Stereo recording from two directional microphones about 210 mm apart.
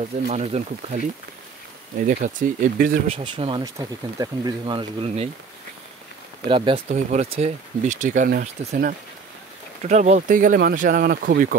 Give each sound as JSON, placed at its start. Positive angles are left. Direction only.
{"t": 0.3, "sound": "speech", "side_deg": -35}
{"t": 2.0, "sound": "speech", "side_deg": -40}
{"t": 3.1, "sound": "speech", "side_deg": -25}
{"t": 6.4, "sound": "speech", "side_deg": -25}